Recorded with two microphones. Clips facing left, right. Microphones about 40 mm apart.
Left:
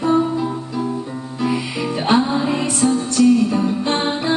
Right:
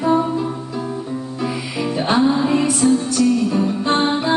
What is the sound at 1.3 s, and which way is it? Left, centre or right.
Music, centre.